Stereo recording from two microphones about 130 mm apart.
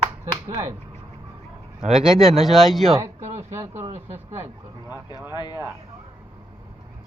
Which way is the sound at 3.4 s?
20° right (ahead or behind).